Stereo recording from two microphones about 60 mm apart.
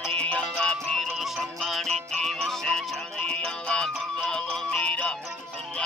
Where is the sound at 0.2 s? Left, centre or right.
Centre.